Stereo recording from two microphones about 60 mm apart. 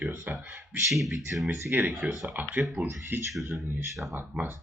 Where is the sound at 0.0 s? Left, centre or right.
Right.